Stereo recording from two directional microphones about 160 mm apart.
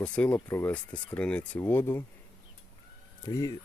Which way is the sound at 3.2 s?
20° left (ahead or behind).